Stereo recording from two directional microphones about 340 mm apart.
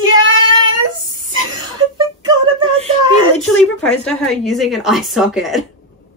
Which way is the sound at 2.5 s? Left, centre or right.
Centre.